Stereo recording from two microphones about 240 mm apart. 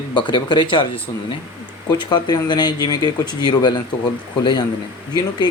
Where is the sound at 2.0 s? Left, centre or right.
Centre.